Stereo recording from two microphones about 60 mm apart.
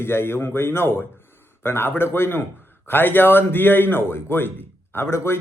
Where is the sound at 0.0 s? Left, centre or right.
Left.